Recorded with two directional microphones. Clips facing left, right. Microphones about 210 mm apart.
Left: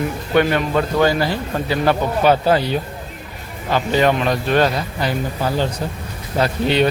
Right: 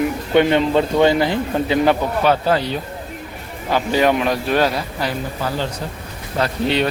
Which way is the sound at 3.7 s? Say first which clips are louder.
Even; 10° right (ahead or behind).